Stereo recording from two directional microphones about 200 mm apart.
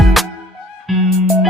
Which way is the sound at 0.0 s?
Centre (ahead or behind).